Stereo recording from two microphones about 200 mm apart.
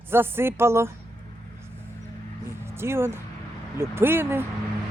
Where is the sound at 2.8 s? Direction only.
10° right (ahead or behind).